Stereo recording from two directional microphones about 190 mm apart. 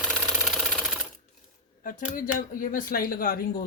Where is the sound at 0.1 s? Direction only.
Centre (ahead or behind).